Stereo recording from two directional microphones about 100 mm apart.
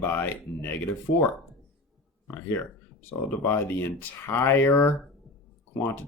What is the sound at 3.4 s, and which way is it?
Speech, 25° left (ahead or behind).